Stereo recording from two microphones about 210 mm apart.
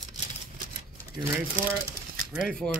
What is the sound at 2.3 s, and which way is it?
Speech, centre (ahead or behind).